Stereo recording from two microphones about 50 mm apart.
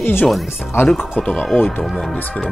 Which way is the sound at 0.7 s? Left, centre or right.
Left.